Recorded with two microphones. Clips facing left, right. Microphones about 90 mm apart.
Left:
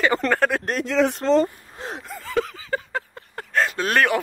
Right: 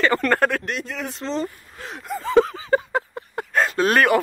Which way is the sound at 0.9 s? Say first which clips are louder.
Left 11 dB; 90° left.